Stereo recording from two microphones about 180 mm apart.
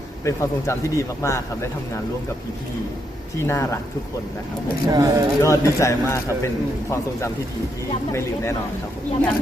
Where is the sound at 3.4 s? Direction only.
15° left (ahead or behind).